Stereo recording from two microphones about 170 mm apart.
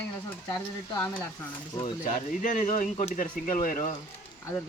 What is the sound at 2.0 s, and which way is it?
Speech, 50° left (ahead or behind).